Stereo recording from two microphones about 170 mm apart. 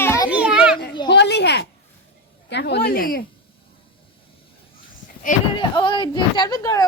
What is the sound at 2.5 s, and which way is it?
Speech, 80° left.